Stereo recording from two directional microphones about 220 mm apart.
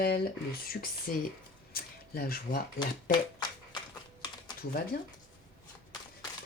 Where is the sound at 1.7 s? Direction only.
40° left (ahead or behind).